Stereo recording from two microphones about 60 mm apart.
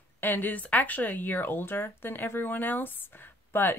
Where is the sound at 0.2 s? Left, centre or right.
Left.